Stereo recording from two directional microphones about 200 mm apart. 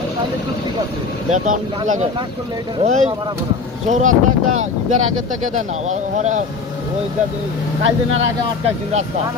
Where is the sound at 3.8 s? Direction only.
40° right (ahead or behind).